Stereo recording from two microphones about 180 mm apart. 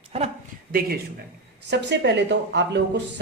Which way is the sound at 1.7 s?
70° right (ahead or behind).